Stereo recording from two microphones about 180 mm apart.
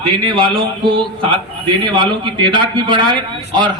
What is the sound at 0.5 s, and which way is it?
A man's voice, 30° right (ahead or behind).